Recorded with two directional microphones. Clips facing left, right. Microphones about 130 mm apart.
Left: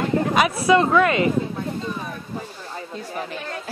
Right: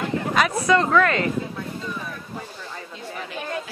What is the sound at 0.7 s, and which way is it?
Speech, 15° left (ahead or behind).